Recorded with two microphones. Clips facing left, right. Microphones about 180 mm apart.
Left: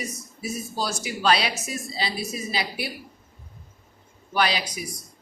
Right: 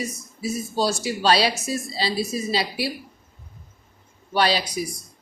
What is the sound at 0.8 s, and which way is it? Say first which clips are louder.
A woman's voice: right 6 dB; 30° right (ahead or behind).